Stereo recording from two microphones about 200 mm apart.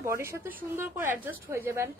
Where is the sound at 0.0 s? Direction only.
15° right (ahead or behind).